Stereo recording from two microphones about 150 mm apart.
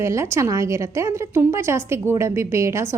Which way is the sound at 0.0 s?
20° right (ahead or behind).